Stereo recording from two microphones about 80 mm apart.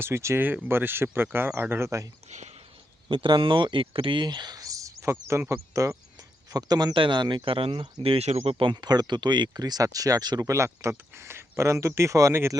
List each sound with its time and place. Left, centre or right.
0.0 s speech: right
0.4 s speech: right
3.1 s speech: right
6.5 s speech: right
6.9 s speech: right
10.4 s speech: right